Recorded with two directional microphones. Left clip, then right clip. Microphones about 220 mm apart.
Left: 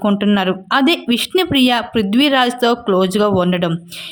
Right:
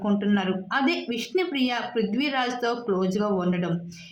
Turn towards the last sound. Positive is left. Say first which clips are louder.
# left 11 dB
turn(degrees=45)  # may be behind; listen again after turning